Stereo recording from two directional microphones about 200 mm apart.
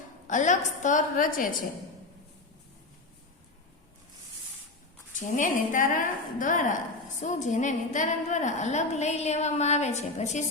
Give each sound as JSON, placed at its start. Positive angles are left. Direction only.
{"t": 0.3, "sound": "a woman's voice", "side_deg": 40}
{"t": 5.4, "sound": "a woman's voice", "side_deg": 40}